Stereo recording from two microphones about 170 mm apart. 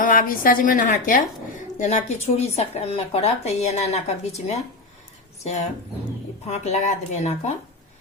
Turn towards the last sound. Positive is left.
turn(degrees=40)  # may be behind; listen again after turning